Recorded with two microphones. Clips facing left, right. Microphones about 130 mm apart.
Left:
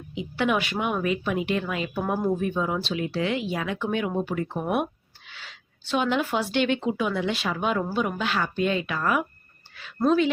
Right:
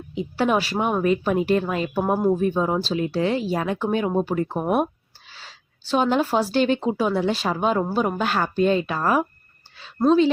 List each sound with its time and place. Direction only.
0.1 s a woman's voice: 40° right (ahead or behind)